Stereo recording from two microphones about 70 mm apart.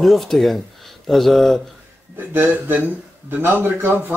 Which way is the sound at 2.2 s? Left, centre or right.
Right.